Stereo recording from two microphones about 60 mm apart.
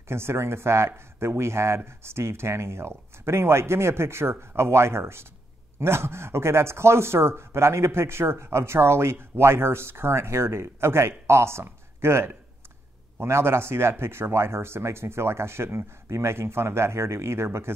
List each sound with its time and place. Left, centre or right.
0.1 s speech: right